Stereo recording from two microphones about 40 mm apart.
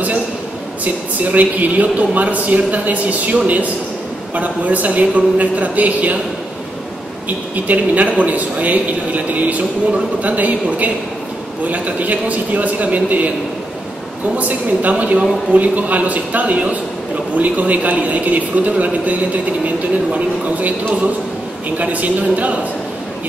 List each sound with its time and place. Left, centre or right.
1.2 s a man's voice: right
7.2 s a man's voice: right
14.3 s a man's voice: right
20.2 s a man's voice: right